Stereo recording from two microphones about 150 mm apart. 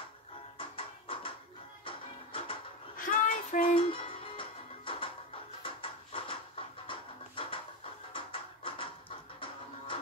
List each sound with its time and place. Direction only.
0.6 s music: 35° left (ahead or behind)
3.0 s child singing: 60° left (ahead or behind)
3.7 s music: 35° left (ahead or behind)
5.6 s a sound: 35° left (ahead or behind)